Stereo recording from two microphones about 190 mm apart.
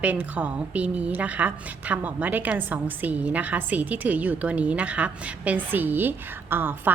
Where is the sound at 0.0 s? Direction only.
10° right (ahead or behind).